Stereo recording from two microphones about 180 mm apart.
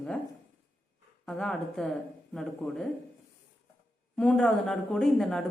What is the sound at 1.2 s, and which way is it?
Speech, 5° left (ahead or behind).